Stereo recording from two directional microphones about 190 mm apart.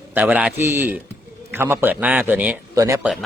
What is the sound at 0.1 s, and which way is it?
Speech, 10° right (ahead or behind).